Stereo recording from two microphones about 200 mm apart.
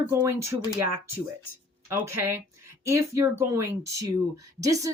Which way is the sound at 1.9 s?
15° right (ahead or behind).